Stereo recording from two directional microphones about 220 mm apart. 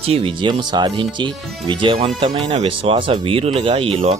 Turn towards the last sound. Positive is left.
turn(degrees=-25)  # may be behind; listen again after turning